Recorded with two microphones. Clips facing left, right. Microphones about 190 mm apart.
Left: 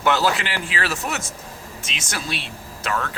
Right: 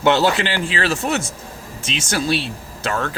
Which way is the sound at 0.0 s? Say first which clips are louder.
Right 4 dB; 25° right (ahead or behind).